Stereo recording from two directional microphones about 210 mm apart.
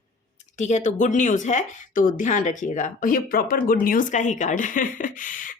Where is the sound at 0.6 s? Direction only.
35° left (ahead or behind).